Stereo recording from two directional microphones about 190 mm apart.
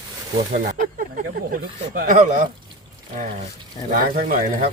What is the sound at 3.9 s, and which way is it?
Speech, 50° right (ahead or behind).